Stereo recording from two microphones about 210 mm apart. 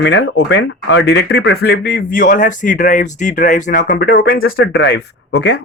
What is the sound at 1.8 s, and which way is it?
Speech, 40° left (ahead or behind).